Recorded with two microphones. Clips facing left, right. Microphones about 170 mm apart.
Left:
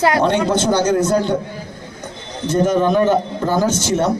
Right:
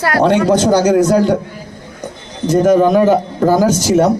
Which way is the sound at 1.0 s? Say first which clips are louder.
Right 5 dB; 10° right (ahead or behind).